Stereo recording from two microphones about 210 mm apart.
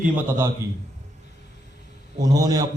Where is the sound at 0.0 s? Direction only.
10° right (ahead or behind).